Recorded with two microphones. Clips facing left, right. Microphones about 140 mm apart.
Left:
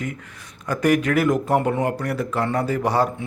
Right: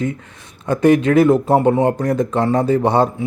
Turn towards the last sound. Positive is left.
turn(degrees=-35)  # may be behind; listen again after turning